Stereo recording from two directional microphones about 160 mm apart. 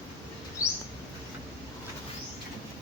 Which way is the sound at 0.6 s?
20° left (ahead or behind).